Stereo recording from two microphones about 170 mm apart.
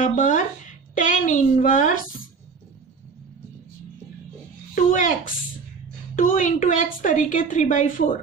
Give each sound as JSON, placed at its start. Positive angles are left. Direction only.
{"t": 0.0, "sound": "a woman's voice", "side_deg": 50}
{"t": 4.7, "sound": "a woman's voice", "side_deg": 50}